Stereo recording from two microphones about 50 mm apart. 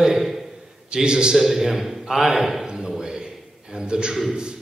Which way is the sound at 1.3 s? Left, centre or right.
Centre.